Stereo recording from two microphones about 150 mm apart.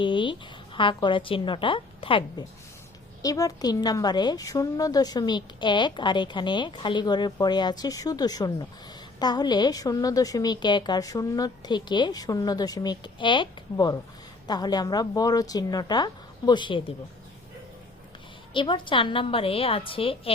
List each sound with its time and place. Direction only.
0.0 s a sound: 35° left (ahead or behind)
0.9 s a woman's voice: 35° left (ahead or behind)
3.2 s a woman's voice: 25° left (ahead or behind)
18.5 s a woman's voice: 30° left (ahead or behind)